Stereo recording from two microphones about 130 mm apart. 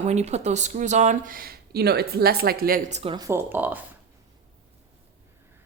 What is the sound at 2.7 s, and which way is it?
Speech, 80° right.